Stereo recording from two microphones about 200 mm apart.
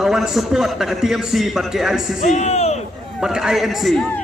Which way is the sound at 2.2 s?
35° left (ahead or behind).